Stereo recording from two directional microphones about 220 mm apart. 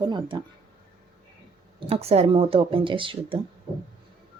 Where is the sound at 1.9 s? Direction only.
25° right (ahead or behind).